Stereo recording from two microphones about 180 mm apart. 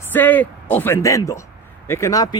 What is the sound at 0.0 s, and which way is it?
A woman's voice, 10° left (ahead or behind).